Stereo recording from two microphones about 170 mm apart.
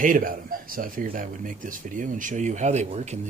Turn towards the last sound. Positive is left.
turn(degrees=-40)  # may be behind; listen again after turning